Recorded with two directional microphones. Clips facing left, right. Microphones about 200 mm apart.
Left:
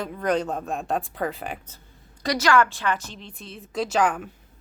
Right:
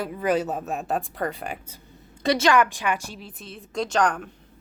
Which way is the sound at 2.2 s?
25° right (ahead or behind).